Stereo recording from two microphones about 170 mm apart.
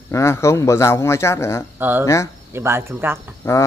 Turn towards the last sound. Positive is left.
turn(degrees=15)  # may be behind; listen again after turning